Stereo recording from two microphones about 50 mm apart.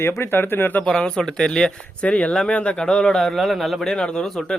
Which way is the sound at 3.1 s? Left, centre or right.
Centre.